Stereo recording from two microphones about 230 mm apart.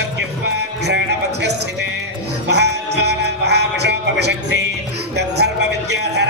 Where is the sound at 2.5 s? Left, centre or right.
Right.